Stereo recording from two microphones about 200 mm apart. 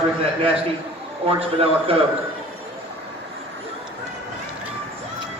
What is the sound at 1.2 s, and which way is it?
Speech, 30° right (ahead or behind).